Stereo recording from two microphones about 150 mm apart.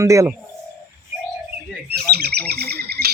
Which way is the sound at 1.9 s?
90° right.